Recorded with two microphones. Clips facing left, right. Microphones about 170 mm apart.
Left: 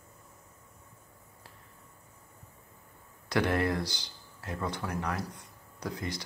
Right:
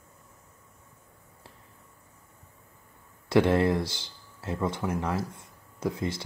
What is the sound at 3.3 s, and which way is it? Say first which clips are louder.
Speech: right 6 dB; 25° right (ahead or behind).